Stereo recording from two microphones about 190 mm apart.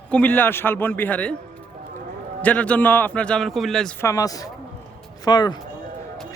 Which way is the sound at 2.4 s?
5° left (ahead or behind).